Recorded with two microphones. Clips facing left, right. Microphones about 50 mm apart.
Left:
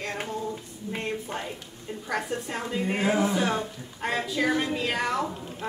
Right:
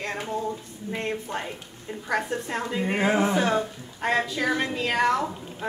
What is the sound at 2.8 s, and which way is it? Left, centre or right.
Speech, right.